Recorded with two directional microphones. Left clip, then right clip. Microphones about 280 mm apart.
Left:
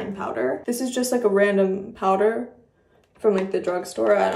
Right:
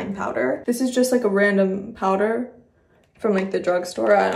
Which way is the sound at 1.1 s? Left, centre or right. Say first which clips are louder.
Left 3 dB; centre.